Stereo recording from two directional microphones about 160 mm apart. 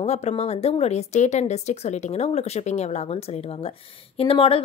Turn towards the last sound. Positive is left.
turn(degrees=35)  # may be behind; listen again after turning